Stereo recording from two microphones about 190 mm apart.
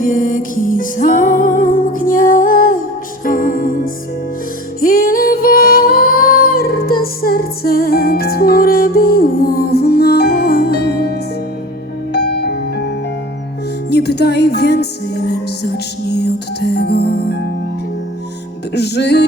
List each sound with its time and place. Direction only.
0.0 s music: 45° left (ahead or behind); by 17.4 s 60° left (ahead or behind)
18.7 s music: 60° left (ahead or behind)